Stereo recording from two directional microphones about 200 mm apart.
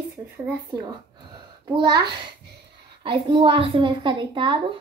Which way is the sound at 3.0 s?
25° right (ahead or behind).